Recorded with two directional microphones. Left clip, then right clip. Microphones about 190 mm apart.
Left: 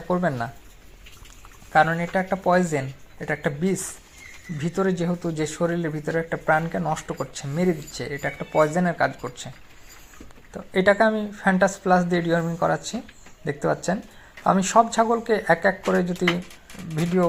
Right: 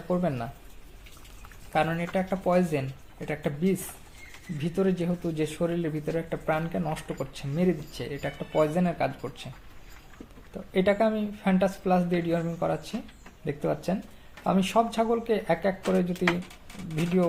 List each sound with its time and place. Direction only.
0.1 s speech: 10° left (ahead or behind)
1.7 s speech: 10° left (ahead or behind)
10.5 s speech: 10° left (ahead or behind)